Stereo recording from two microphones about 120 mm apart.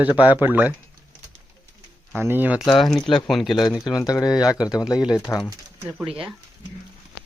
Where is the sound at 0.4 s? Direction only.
15° right (ahead or behind).